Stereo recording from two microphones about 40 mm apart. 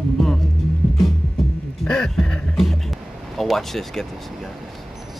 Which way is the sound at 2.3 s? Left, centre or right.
Left.